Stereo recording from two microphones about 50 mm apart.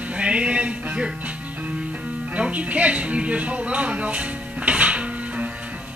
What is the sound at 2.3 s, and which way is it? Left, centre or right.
Music, right.